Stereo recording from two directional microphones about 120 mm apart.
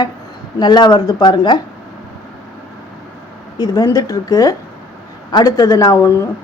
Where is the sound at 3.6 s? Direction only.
30° left (ahead or behind).